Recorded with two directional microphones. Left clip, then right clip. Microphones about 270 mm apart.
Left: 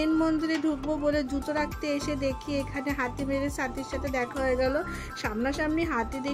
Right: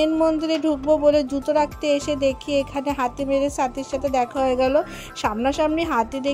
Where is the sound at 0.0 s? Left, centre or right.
Centre.